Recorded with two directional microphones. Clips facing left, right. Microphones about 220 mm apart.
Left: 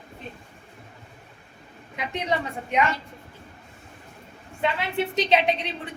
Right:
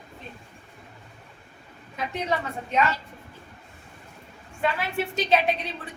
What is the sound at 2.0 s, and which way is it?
Speech, 15° left (ahead or behind).